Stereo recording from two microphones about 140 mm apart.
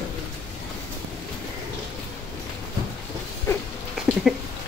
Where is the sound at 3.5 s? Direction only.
15° left (ahead or behind).